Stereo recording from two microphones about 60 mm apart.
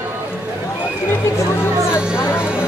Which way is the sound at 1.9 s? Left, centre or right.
Centre.